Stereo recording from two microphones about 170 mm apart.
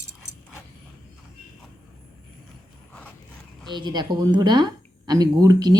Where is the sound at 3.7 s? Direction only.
25° right (ahead or behind).